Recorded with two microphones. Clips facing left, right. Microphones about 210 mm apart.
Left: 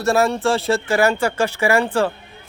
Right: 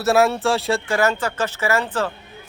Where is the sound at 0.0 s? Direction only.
5° right (ahead or behind).